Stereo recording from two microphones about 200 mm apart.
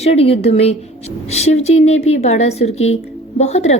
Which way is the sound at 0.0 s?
30° left (ahead or behind).